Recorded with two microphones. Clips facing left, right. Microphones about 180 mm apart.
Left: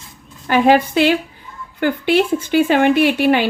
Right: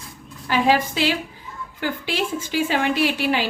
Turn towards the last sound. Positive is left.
turn(degrees=60)  # may be behind; listen again after turning